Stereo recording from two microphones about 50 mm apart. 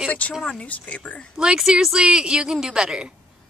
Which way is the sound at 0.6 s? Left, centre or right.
Left.